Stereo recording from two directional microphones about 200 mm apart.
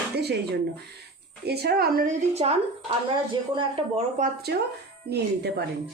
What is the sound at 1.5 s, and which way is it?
Speech, 50° right (ahead or behind).